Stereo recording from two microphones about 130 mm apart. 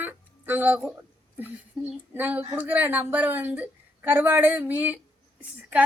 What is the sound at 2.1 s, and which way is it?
A woman's voice, 15° right (ahead or behind).